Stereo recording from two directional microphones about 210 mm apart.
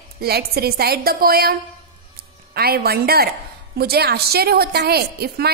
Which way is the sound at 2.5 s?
50° right (ahead or behind).